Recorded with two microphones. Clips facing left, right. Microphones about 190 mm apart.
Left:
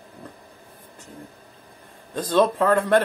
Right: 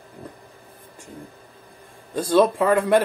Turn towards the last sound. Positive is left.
turn(degrees=-10)  # may be behind; listen again after turning